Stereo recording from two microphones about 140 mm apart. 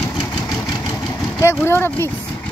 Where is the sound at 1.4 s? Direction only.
20° left (ahead or behind).